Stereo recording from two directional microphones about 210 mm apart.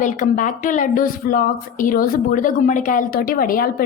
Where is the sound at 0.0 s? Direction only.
40° left (ahead or behind).